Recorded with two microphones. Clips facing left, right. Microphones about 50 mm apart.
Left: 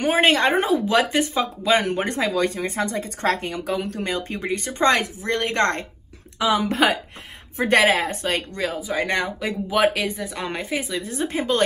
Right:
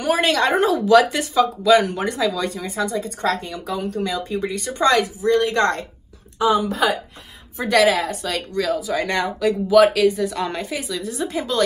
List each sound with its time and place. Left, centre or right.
0.0 s speech: left
2.0 s speech: left
7.5 s speech: left